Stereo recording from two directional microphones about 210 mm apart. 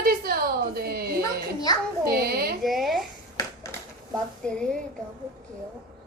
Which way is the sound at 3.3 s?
15° left (ahead or behind).